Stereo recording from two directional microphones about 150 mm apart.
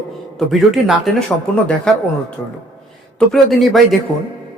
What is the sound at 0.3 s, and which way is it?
Speech, centre (ahead or behind).